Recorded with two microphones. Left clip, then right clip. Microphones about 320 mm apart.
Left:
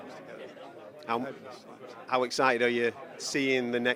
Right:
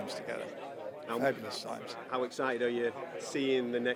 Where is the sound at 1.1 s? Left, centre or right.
Left.